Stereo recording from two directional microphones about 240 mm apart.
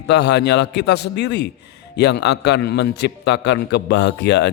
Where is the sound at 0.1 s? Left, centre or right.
Left.